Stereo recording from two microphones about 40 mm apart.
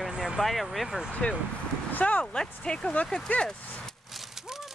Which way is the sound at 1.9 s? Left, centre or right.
Left.